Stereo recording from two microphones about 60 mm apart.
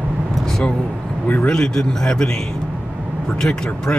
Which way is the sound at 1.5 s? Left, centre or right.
Centre.